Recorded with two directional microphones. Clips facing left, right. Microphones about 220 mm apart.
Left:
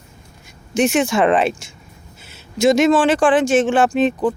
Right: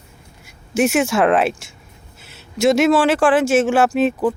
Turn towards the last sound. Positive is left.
turn(degrees=-5)  # may be behind; listen again after turning